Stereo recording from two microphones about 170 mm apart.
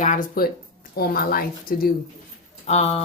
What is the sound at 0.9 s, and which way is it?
Speech, 65° left (ahead or behind).